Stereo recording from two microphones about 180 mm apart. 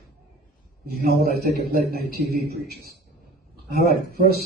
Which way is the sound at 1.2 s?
60° right (ahead or behind).